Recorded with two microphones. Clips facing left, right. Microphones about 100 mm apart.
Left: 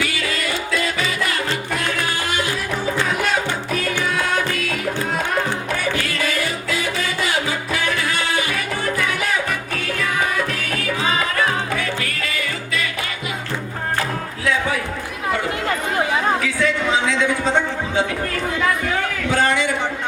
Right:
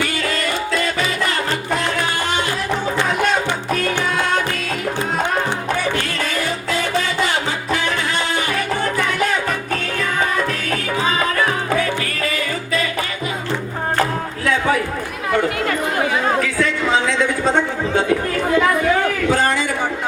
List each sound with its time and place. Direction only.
0.0 s music: 40° right (ahead or behind)
11.8 s music: 35° right (ahead or behind)
19.3 s a sound: 40° right (ahead or behind)